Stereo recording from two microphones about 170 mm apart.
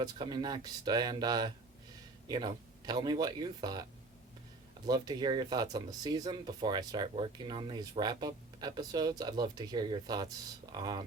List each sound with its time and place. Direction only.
0.0 s speech: 25° right (ahead or behind)
4.9 s speech: 25° right (ahead or behind)